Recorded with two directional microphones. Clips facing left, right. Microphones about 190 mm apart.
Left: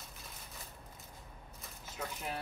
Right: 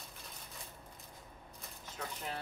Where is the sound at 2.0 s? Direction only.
10° left (ahead or behind).